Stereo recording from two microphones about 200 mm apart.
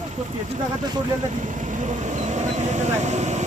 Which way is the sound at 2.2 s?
35° right (ahead or behind).